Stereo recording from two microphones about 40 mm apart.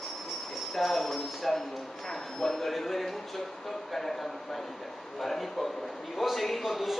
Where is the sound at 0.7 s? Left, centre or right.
Centre.